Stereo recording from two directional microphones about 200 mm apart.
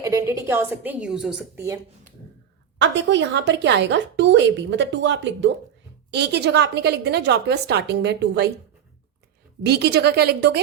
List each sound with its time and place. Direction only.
0.0 s a woman's voice: 15° right (ahead or behind)
2.7 s a woman's voice: 65° right (ahead or behind)
9.6 s a woman's voice: 55° right (ahead or behind)